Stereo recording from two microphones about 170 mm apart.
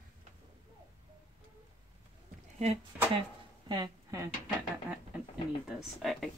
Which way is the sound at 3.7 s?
20° right (ahead or behind).